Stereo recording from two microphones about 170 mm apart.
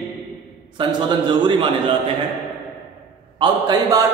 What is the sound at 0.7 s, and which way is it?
A man's voice, 25° right (ahead or behind).